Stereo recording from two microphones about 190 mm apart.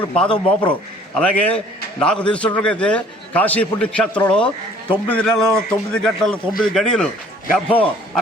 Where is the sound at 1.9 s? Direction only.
5° left (ahead or behind).